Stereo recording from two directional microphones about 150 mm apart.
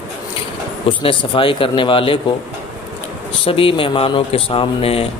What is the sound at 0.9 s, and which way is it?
Speech, 35° left (ahead or behind).